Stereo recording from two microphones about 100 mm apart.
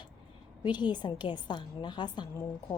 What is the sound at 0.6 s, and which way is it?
A woman's voice, 50° left (ahead or behind).